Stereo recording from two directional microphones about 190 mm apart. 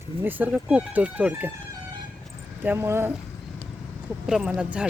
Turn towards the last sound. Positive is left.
turn(degrees=-5)  # may be behind; listen again after turning